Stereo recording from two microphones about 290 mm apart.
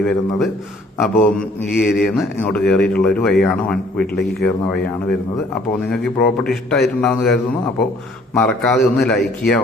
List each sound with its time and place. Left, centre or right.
0.0 s a man's voice: centre
4.0 s a man's voice: left
5.9 s a man's voice: centre
8.4 s a man's voice: centre